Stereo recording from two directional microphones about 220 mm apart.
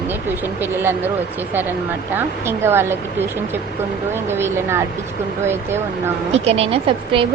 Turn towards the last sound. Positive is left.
turn(degrees=-25)  # may be behind; listen again after turning